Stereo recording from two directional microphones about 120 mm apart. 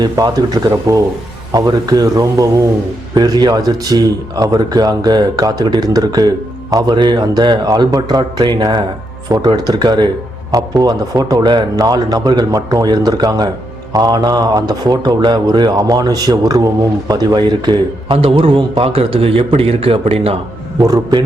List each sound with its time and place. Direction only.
0.0 s a man's voice: 35° right (ahead or behind); by 20.3 s 55° right (ahead or behind)
20.8 s speech: 35° right (ahead or behind)